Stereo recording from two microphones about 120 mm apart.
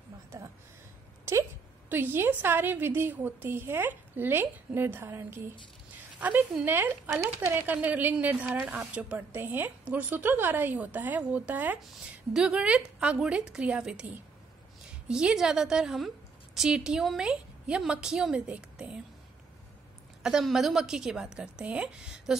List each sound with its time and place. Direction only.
1.3 s a woman's voice: 20° right (ahead or behind)
20.2 s a woman's voice: 5° right (ahead or behind)